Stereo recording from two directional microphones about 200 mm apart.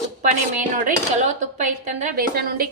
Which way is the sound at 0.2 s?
40° right (ahead or behind).